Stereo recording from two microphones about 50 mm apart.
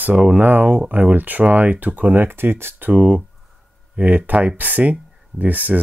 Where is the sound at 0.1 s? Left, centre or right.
Centre.